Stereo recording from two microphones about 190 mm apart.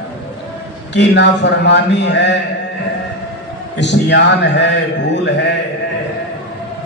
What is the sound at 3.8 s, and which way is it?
A man's voice, 65° left (ahead or behind).